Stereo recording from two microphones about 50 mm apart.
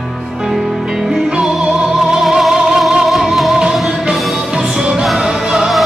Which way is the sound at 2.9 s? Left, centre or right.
Centre.